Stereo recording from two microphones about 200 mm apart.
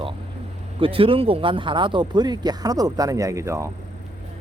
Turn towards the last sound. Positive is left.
turn(degrees=-15)  # may be behind; listen again after turning